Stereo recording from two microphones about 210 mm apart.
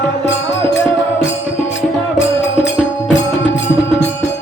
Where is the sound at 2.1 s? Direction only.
60° left (ahead or behind).